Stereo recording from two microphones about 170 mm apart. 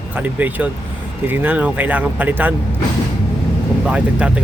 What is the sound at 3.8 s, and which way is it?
Speech, 5° right (ahead or behind).